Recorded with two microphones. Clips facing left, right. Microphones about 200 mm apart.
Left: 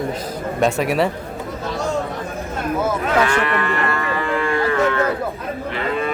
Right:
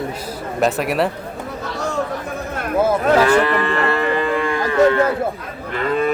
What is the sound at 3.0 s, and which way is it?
Cattle, 30° right (ahead or behind).